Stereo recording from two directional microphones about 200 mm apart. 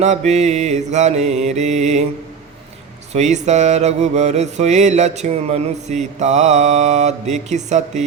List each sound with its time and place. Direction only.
0.0 s mantra: 35° right (ahead or behind)
3.1 s mantra: 35° right (ahead or behind)